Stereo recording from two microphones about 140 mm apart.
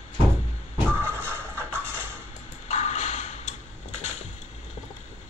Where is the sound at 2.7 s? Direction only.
55° left (ahead or behind).